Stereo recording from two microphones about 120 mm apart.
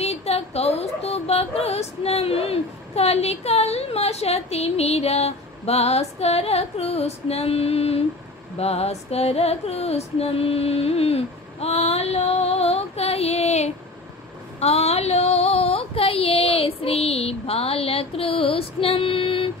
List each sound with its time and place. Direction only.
0.0 s speech: 60° left (ahead or behind)
8.5 s female singing: 60° left (ahead or behind)
14.6 s a sound: 60° left (ahead or behind)